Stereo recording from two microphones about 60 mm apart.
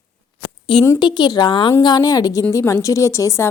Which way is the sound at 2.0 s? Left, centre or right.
Left.